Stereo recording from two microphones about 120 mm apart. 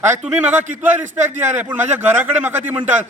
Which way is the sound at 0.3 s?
15° right (ahead or behind).